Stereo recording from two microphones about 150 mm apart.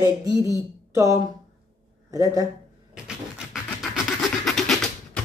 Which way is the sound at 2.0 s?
20° right (ahead or behind).